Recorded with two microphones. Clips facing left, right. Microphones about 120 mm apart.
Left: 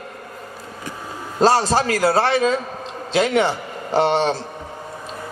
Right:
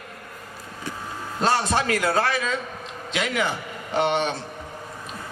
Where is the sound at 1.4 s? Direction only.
35° left (ahead or behind).